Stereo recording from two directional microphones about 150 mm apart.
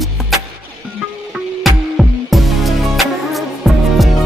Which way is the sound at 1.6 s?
Centre (ahead or behind).